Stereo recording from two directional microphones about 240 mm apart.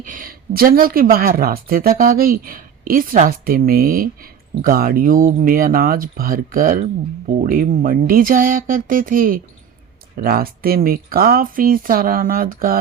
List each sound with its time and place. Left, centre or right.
0.0 s speech: right